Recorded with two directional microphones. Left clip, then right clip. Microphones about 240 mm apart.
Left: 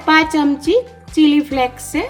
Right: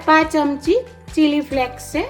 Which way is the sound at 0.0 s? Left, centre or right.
Left.